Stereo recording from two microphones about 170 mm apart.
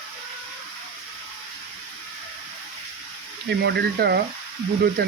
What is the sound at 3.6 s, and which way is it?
Speech, 75° right (ahead or behind).